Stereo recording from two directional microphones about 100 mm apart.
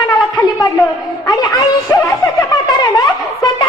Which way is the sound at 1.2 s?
40° left (ahead or behind).